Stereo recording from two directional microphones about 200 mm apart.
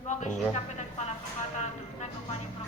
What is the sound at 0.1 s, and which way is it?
Music, 35° left (ahead or behind).